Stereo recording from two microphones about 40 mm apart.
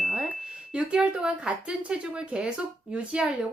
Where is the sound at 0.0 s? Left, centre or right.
Centre.